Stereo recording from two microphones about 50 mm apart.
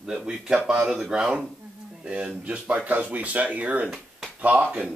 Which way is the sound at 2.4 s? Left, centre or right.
Right.